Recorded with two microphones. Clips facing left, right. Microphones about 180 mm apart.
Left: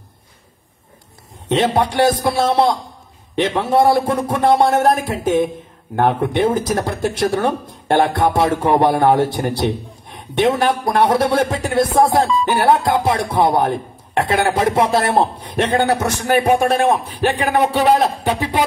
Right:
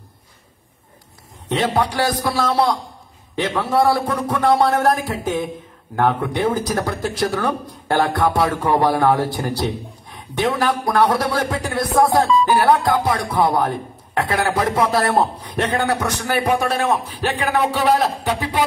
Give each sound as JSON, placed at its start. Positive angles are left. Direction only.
{"t": 1.5, "sound": "a man's voice", "side_deg": 25}
{"t": 16.6, "sound": "a man's voice", "side_deg": 50}
{"t": 17.2, "sound": "speech", "side_deg": 25}